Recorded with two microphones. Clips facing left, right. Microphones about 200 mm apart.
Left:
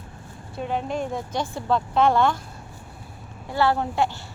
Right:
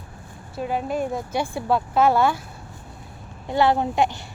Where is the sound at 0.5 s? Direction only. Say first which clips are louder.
Right 2 dB; 5° right (ahead or behind).